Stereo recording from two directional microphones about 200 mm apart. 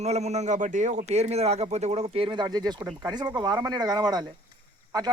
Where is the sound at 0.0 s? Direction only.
35° right (ahead or behind).